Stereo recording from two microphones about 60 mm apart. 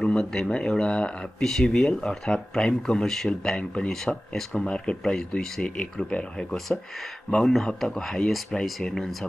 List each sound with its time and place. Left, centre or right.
0.0 s speech: centre
1.4 s speech: centre